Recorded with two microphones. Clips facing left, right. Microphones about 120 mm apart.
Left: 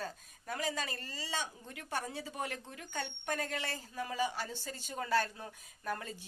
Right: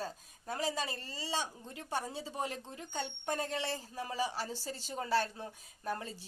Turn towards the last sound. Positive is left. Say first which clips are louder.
# right 1 dB
turn(degrees=-30)  # may be behind; listen again after turning